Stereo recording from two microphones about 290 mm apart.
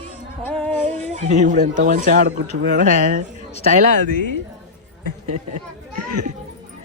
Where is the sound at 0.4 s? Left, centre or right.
Centre.